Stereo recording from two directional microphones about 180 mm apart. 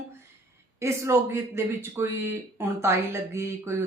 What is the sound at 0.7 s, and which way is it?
Speech, 15° right (ahead or behind).